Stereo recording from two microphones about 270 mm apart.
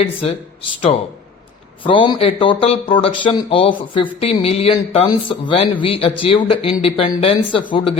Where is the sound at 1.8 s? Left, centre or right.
Centre.